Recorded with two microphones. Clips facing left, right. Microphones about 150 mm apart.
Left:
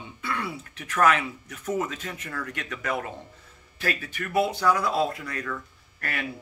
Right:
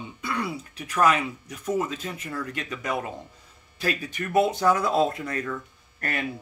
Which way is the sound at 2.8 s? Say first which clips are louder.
Even; 15° right (ahead or behind).